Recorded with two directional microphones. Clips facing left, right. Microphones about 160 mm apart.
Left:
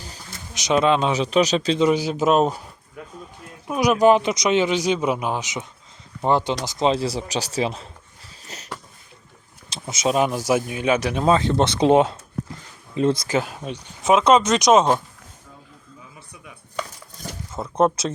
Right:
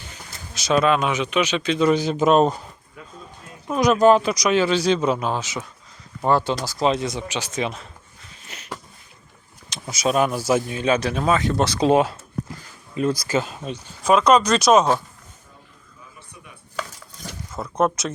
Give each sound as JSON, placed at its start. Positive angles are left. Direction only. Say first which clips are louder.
{"t": 0.5, "sound": "a man's voice", "louder": "even", "side_deg": 20}
{"t": 1.8, "sound": "speech", "louder": "right 3 dB", "side_deg": 10}
{"t": 3.7, "sound": "a man's voice", "louder": "right 1 dB", "side_deg": 10}
{"t": 8.4, "sound": "a sound", "louder": "left 3 dB", "side_deg": 35}
{"t": 9.6, "sound": "speech", "louder": "even", "side_deg": 25}
{"t": 13.3, "sound": "speech", "louder": "even", "side_deg": 10}
{"t": 17.5, "sound": "speech", "louder": "left 2 dB", "side_deg": 25}